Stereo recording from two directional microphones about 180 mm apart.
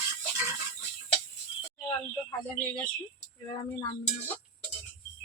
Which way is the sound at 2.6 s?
5° left (ahead or behind).